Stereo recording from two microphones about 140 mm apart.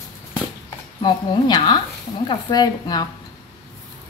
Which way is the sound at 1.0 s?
30° left (ahead or behind).